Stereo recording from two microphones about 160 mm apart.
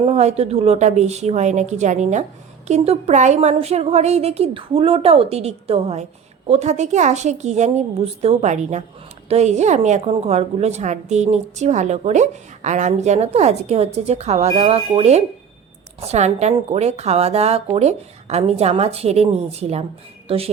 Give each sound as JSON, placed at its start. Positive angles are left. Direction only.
{"t": 0.0, "sound": "a woman's voice", "side_deg": -40}